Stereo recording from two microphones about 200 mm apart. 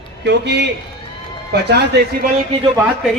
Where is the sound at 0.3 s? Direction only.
55° right (ahead or behind).